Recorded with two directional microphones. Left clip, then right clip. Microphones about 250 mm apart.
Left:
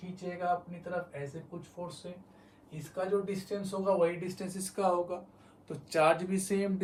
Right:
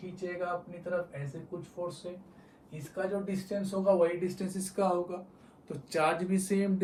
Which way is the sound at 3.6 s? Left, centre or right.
Centre.